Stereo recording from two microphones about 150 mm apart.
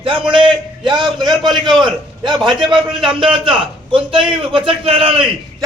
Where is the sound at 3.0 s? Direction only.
35° right (ahead or behind).